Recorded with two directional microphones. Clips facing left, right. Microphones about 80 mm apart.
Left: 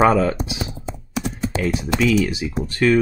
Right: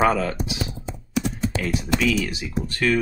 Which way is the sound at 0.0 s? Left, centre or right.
Left.